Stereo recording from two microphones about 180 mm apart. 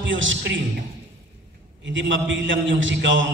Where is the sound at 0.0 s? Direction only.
90° right.